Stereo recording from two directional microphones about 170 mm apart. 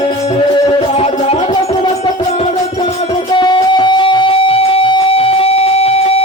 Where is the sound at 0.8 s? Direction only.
35° left (ahead or behind).